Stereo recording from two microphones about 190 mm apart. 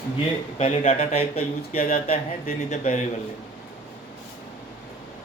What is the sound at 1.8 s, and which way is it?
Speech, 50° left (ahead or behind).